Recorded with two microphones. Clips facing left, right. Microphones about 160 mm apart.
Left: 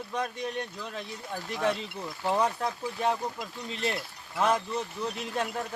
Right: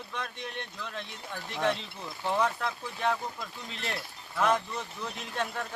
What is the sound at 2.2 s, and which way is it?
Speech, 15° left (ahead or behind).